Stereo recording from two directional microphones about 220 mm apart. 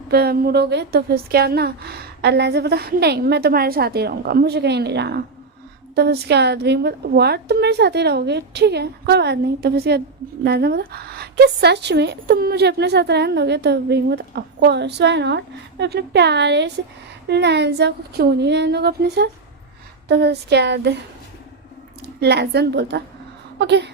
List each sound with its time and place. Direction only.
0.1 s a woman's voice: 45° right (ahead or behind)
22.0 s a woman's voice: 50° right (ahead or behind)